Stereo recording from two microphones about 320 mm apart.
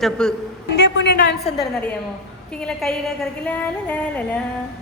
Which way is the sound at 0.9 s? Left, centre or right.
Left.